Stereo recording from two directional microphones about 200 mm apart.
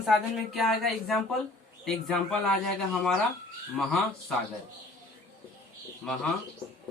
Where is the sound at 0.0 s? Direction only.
Centre (ahead or behind).